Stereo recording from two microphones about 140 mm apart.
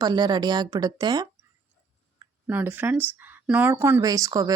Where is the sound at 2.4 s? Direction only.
15° right (ahead or behind).